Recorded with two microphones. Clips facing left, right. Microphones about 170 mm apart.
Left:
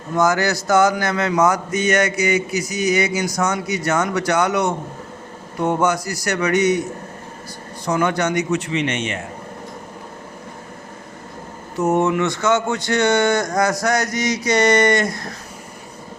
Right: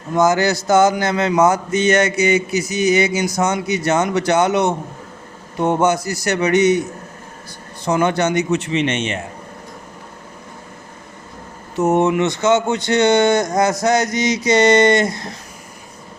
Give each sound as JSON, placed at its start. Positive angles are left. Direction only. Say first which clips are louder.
{"t": 0.2, "sound": "speech", "louder": "right 3 dB", "side_deg": -25}
{"t": 7.9, "sound": "speech", "louder": "right 2 dB", "side_deg": -25}
{"t": 11.8, "sound": "speech", "louder": "right 2 dB", "side_deg": -20}